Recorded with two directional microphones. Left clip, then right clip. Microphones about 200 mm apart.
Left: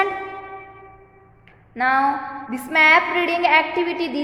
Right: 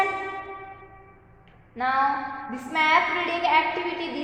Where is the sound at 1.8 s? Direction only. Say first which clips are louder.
Left 5 dB; 45° left (ahead or behind).